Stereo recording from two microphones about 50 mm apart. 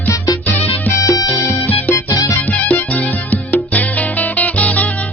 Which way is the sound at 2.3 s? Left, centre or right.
Left.